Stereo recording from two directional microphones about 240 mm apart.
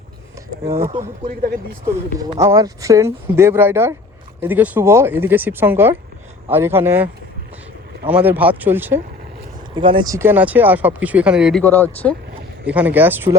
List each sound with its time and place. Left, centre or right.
0.9 s speech: right
1.9 s speech: centre
9.7 s speech: centre
12.6 s speech: centre